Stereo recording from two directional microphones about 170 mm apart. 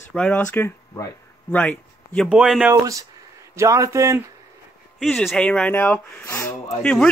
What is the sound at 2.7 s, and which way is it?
A man's voice, 20° right (ahead or behind).